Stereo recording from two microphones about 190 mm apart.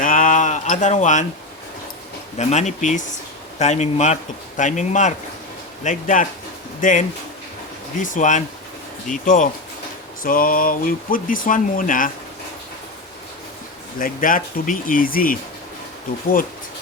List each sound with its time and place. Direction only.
0.0 s a sound: 45° left (ahead or behind)
2.4 s a man's voice: 35° left (ahead or behind)
14.0 s speech: 45° left (ahead or behind)